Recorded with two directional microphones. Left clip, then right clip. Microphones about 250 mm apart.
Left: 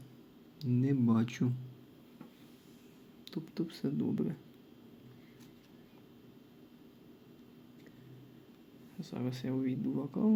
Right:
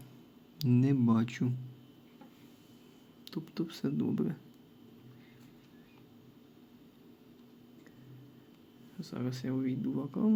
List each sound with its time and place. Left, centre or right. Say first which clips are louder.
0.6 s speech: right 4 dB; right
0.9 s speech: right 2 dB; centre
3.2 s speech: right 1 dB; centre
9.0 s speech: right 1 dB; centre